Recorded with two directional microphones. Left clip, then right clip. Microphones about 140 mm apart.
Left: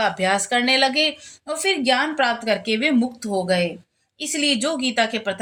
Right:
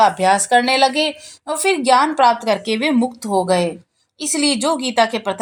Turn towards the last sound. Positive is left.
turn(degrees=-15)  # may be behind; listen again after turning